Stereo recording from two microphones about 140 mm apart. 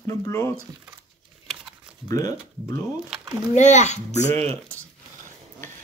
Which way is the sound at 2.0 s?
25° left (ahead or behind).